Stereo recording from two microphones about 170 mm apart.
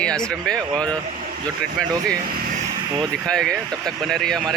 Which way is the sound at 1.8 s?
5° left (ahead or behind).